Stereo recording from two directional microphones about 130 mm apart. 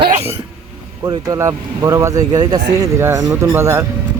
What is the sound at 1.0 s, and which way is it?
Speech, 25° right (ahead or behind).